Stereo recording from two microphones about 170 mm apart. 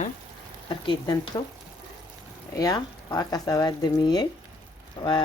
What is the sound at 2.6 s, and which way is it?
Speech, 20° left (ahead or behind).